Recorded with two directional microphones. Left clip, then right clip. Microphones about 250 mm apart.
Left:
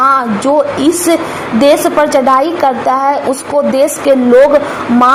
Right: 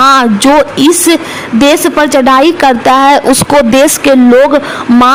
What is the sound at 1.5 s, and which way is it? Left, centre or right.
A man's voice, right.